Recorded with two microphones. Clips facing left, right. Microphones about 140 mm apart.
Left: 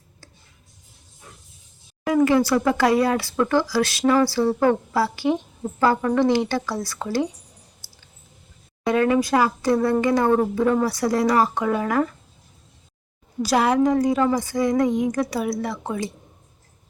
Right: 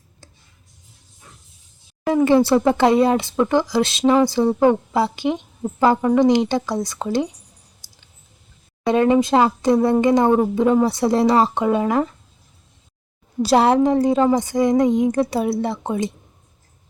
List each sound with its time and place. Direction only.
2.2 s speech: 25° right (ahead or behind)
7.8 s a sound: 15° right (ahead or behind)
8.9 s speech: 25° right (ahead or behind)
13.4 s speech: 30° right (ahead or behind)